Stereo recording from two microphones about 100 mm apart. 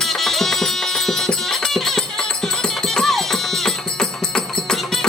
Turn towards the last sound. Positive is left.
turn(degrees=5)  # may be behind; listen again after turning